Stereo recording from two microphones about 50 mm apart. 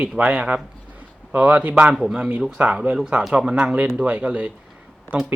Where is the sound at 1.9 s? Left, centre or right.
Centre.